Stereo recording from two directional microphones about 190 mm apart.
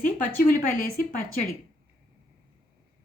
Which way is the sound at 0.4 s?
45° left (ahead or behind).